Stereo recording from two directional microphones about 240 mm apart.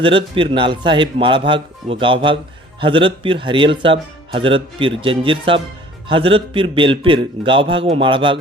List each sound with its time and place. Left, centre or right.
0.0 s speech: right